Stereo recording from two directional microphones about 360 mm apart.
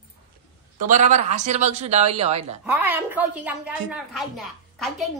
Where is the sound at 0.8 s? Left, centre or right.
Centre.